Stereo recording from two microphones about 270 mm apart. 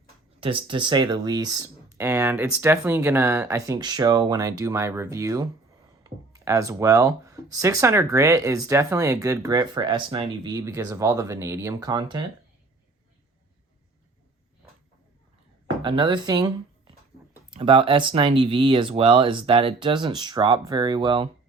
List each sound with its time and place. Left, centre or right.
0.3 s speech: centre
15.8 s speech: centre